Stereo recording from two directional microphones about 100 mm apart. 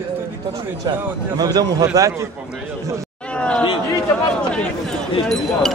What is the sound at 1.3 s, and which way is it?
Speech, 40° right (ahead or behind).